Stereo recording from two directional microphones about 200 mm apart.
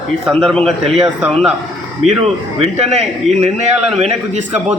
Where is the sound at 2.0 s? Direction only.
30° right (ahead or behind).